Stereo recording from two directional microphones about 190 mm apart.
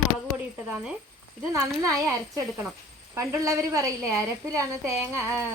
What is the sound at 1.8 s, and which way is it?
A woman's voice, 15° right (ahead or behind).